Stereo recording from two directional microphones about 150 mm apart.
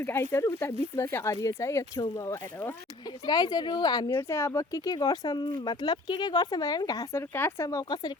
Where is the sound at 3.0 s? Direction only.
25° left (ahead or behind).